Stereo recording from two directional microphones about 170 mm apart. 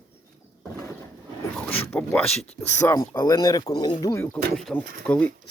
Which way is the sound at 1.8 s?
15° left (ahead or behind).